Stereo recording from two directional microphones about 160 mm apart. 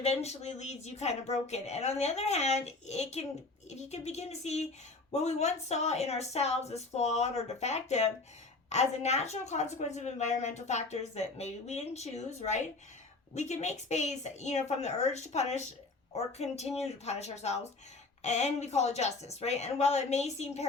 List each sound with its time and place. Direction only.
0.0 s a woman's voice: 40° left (ahead or behind)